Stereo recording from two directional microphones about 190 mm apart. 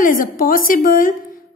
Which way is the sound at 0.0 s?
45° left (ahead or behind).